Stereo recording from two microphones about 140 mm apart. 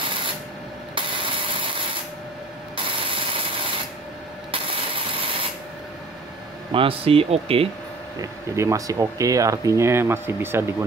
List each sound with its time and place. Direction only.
0.9 s rub: 40° right (ahead or behind)
2.7 s ratchet: 40° right (ahead or behind)
4.5 s rub: 40° right (ahead or behind)
6.7 s speech: 40° right (ahead or behind)
8.2 s speech: 20° right (ahead or behind)